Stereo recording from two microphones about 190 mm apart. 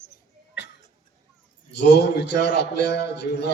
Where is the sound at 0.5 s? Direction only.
65° left (ahead or behind).